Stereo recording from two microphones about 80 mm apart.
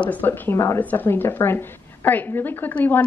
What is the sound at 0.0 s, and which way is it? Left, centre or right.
A woman's voice, left.